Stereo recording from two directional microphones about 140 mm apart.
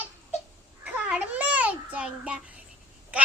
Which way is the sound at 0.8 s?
10° right (ahead or behind).